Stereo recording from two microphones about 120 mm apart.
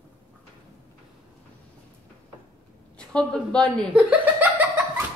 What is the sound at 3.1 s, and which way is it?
Speech, 10° left (ahead or behind).